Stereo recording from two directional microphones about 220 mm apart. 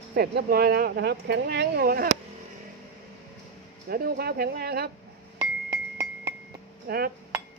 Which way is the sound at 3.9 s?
45° right (ahead or behind).